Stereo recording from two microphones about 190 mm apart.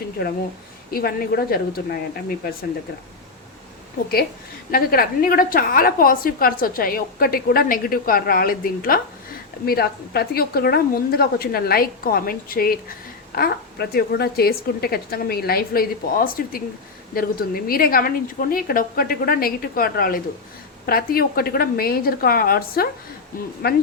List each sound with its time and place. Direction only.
0.2 s a woman's voice: 55° left (ahead or behind)
4.7 s a woman's voice: 50° left (ahead or behind)